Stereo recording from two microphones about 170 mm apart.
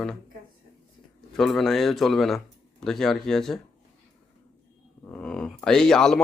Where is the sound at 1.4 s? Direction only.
Centre (ahead or behind).